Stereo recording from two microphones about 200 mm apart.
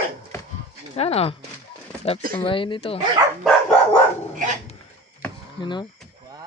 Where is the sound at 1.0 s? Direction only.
30° left (ahead or behind).